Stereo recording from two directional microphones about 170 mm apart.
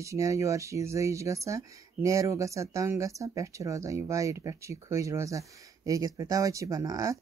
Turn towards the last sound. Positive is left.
turn(degrees=-20)  # may be behind; listen again after turning